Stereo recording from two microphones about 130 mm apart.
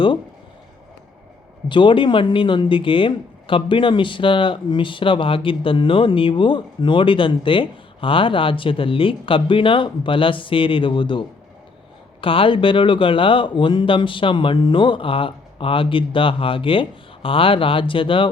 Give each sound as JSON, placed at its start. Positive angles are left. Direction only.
{"t": 1.6, "sound": "speech", "side_deg": 40}